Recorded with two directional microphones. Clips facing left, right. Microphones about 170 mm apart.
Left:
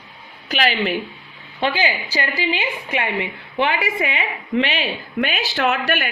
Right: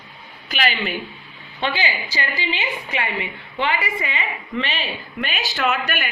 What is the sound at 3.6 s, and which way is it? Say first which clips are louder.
Speech: even; 80° left.